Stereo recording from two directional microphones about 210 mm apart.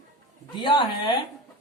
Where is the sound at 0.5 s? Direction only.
20° left (ahead or behind).